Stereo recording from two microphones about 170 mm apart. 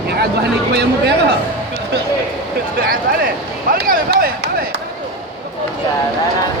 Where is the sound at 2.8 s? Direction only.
60° right (ahead or behind).